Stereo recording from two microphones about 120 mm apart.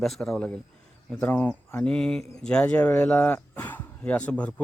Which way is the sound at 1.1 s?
15° left (ahead or behind).